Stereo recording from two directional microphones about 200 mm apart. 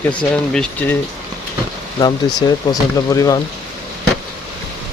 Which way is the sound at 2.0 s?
20° left (ahead or behind).